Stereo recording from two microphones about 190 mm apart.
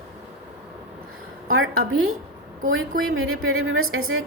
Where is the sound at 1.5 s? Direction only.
90° right.